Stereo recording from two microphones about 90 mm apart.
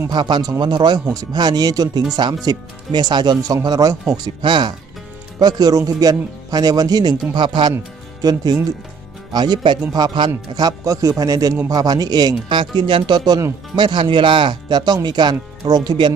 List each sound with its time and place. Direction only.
0.1 s speech: 55° right (ahead or behind)
1.1 s speech: 45° right (ahead or behind)
4.1 s speech: 60° right (ahead or behind)
5.4 s speech: 45° right (ahead or behind)
8.2 s speech: 45° right (ahead or behind)